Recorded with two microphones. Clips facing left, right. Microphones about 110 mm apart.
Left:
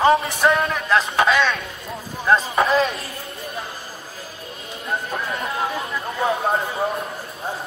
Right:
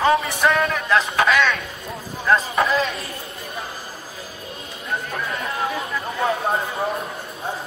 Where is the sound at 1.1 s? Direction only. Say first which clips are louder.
Left 1 dB; 25° left (ahead or behind).